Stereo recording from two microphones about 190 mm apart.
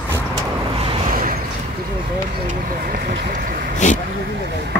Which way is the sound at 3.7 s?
40° left (ahead or behind).